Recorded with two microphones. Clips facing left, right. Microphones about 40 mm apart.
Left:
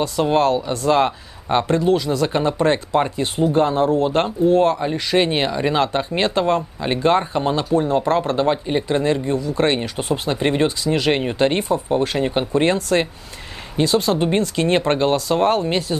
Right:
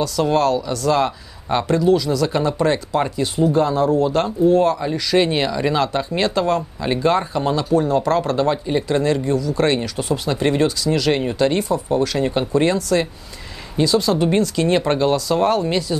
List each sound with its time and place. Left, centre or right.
0.0 s speech: left
12.6 s speech: left